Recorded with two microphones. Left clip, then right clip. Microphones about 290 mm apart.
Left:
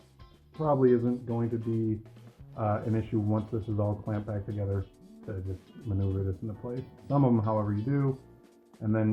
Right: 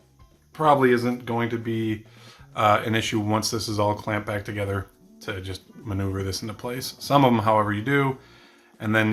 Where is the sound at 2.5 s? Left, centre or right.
Right.